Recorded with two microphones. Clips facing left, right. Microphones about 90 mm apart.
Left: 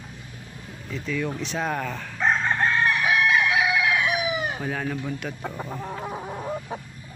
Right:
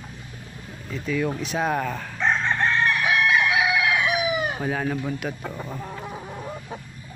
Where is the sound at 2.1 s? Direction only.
10° left (ahead or behind).